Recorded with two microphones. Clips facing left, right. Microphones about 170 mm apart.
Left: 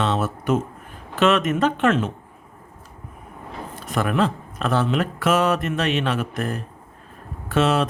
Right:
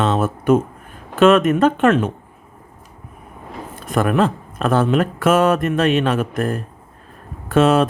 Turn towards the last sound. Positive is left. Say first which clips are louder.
# right 6 dB
turn(degrees=-50)  # may be behind; listen again after turning